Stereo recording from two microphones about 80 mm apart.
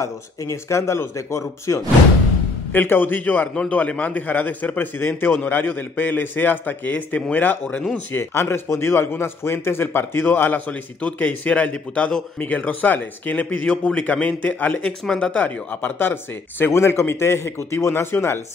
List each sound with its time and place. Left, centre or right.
0.0 s speech: left
2.7 s a man's voice: left
14.9 s speech: centre
15.3 s speech: left